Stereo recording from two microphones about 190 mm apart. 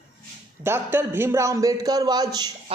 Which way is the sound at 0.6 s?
10° right (ahead or behind).